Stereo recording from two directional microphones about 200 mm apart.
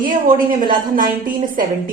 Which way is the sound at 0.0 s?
45° right (ahead or behind).